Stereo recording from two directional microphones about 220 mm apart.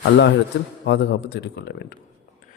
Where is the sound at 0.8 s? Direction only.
50° left (ahead or behind).